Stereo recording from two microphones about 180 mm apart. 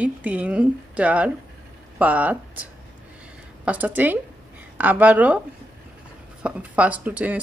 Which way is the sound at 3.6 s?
10° right (ahead or behind).